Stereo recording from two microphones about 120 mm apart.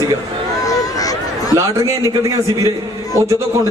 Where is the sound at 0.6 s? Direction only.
30° left (ahead or behind).